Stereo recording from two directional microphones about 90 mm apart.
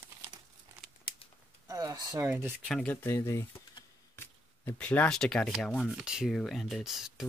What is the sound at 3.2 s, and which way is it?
Speech, 35° left (ahead or behind).